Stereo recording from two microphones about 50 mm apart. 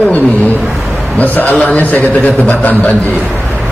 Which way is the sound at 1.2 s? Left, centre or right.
Left.